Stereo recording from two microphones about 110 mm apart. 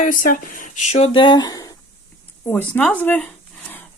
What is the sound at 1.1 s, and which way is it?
Speech, 45° left (ahead or behind).